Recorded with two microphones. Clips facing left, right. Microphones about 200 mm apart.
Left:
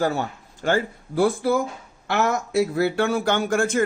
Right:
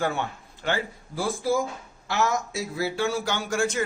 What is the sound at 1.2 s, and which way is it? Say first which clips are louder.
Speech: left 5 dB; 60° left (ahead or behind).